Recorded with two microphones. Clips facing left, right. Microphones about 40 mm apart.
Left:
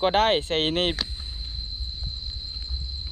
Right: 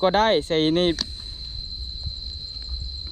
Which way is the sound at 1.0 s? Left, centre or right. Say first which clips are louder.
Even; left.